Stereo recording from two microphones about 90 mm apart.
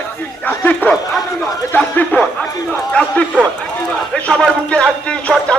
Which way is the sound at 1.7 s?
15° left (ahead or behind).